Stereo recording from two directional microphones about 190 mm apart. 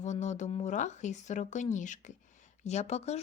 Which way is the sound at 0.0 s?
40° left (ahead or behind).